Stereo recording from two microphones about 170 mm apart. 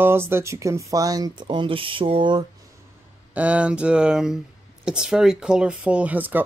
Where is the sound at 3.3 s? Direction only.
10° right (ahead or behind).